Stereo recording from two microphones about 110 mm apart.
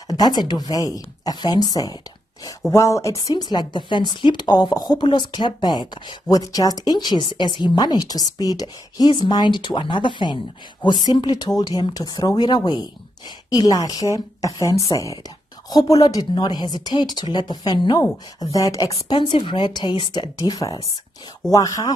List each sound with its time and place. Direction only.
0.1 s speech: 40° left (ahead or behind)
18.4 s speech: 30° left (ahead or behind)
19.0 s speech: 45° left (ahead or behind)